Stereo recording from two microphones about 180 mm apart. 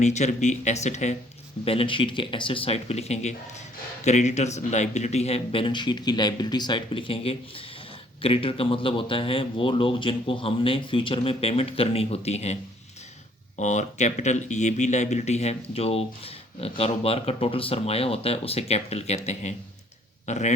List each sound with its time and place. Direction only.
0.0 s speech: 40° left (ahead or behind)
13.6 s speech: 40° left (ahead or behind)